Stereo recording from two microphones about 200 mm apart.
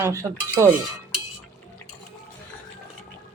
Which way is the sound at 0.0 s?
15° right (ahead or behind).